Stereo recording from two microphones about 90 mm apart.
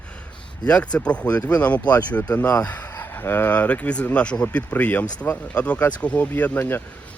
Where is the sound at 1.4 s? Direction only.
45° left (ahead or behind).